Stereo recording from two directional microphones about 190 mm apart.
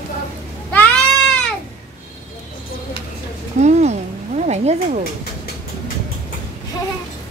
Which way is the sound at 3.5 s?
35° right (ahead or behind).